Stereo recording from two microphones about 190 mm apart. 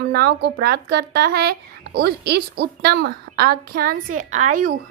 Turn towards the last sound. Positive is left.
turn(degrees=-45)  # may be behind; listen again after turning